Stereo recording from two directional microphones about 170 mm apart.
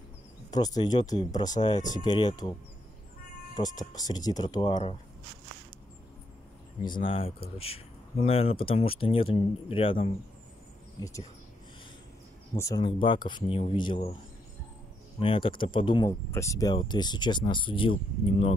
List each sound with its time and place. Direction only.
0.5 s speech: 25° left (ahead or behind)
3.5 s speech: 25° left (ahead or behind)
6.8 s speech: 30° left (ahead or behind)
11.0 s speech: 20° left (ahead or behind)
12.5 s speech: 20° left (ahead or behind)
12.8 s speech: 30° left (ahead or behind)
15.1 s speech: 30° left (ahead or behind)
16.1 s speech: 15° left (ahead or behind)